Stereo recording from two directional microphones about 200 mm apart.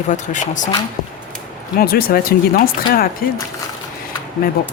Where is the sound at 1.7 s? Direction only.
50° left (ahead or behind).